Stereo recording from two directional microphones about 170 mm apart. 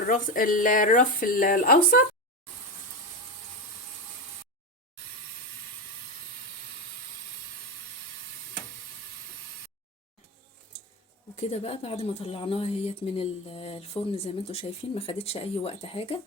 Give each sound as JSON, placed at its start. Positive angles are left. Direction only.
{"t": 0.1, "sound": "speech", "side_deg": 50}
{"t": 11.3, "sound": "a woman's voice", "side_deg": 40}